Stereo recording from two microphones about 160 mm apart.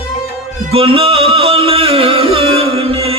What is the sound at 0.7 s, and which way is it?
Music, 35° right (ahead or behind).